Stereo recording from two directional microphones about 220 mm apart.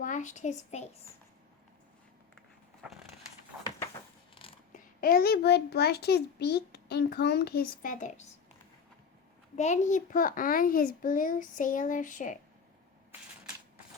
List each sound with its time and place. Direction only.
0.0 s a child's voice: 35° left (ahead or behind)
4.7 s a child's voice: 40° left (ahead or behind)
9.6 s a child's voice: 35° left (ahead or behind)